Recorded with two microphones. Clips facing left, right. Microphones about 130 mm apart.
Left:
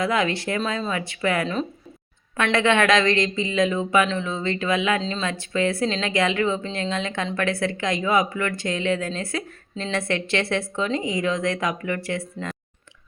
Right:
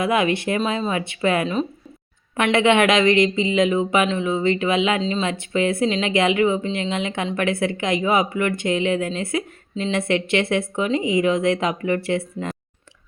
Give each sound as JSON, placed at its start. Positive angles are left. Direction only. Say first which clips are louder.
{"t": 0.0, "sound": "speech", "louder": "right 3 dB", "side_deg": -20}